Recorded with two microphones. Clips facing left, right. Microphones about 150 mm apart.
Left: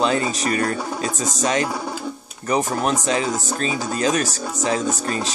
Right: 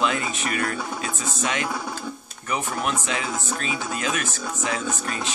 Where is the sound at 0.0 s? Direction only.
35° left (ahead or behind).